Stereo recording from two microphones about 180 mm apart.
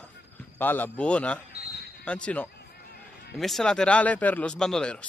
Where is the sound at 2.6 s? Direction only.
60° left (ahead or behind).